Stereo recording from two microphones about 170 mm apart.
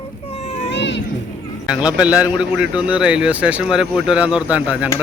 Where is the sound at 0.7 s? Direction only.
90° left.